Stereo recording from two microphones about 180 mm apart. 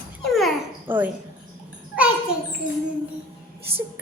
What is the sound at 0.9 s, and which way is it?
Speech, 10° right (ahead or behind).